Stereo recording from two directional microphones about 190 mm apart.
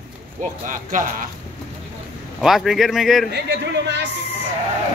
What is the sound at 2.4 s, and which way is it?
Speech, centre (ahead or behind).